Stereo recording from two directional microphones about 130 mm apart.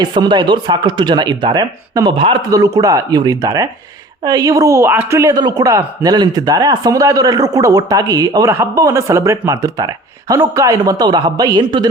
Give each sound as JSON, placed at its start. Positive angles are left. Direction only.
{"t": 0.0, "sound": "a man's voice", "side_deg": -35}
{"t": 2.5, "sound": "speech", "side_deg": -25}